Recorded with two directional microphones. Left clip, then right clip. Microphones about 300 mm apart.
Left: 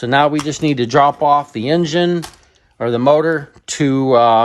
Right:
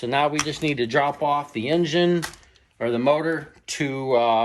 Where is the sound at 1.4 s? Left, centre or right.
Left.